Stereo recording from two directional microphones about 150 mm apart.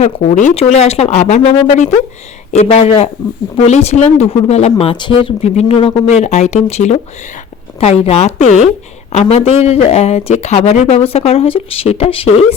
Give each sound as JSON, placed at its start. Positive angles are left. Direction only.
{"t": 0.0, "sound": "speech", "side_deg": 50}